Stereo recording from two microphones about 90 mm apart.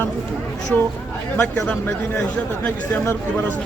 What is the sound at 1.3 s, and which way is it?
Speech, 15° left (ahead or behind).